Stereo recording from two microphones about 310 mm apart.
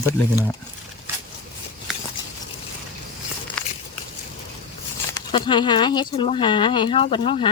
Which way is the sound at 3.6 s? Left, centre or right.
Centre.